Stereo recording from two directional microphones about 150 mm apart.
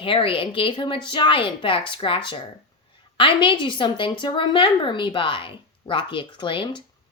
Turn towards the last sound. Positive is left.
turn(degrees=35)  # may be behind; listen again after turning